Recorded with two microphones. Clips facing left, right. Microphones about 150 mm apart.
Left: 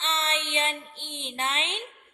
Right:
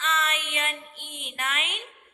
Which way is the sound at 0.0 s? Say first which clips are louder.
Right 1 dB; 30° left (ahead or behind).